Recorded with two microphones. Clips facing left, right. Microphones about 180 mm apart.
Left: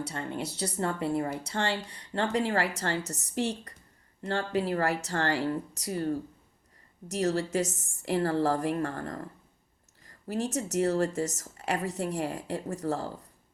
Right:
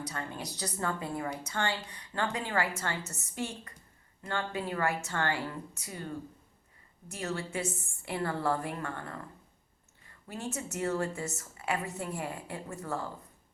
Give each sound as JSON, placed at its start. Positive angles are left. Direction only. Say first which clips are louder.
{"t": 0.0, "sound": "speech", "louder": "left 5 dB", "side_deg": 25}
{"t": 7.2, "sound": "speech", "louder": "left 7 dB", "side_deg": 40}